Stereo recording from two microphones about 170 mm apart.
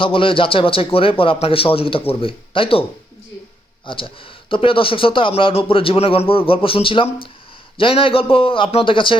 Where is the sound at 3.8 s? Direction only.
30° left (ahead or behind).